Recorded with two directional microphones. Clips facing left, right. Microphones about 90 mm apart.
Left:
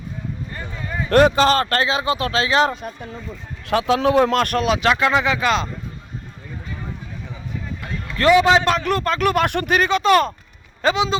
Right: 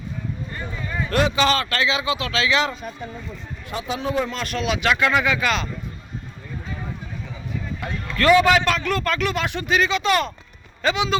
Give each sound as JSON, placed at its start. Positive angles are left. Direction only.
{"t": 1.1, "sound": "a man's voice", "side_deg": 45}
{"t": 3.7, "sound": "speech", "side_deg": 80}
{"t": 4.6, "sound": "a man's voice", "side_deg": 35}
{"t": 8.1, "sound": "a man's voice", "side_deg": 20}
{"t": 10.8, "sound": "a man's voice", "side_deg": 35}